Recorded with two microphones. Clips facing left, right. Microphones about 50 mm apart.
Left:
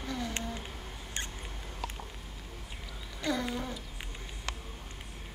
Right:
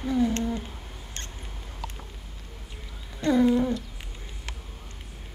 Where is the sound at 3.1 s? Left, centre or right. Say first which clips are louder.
Right 10 dB; centre.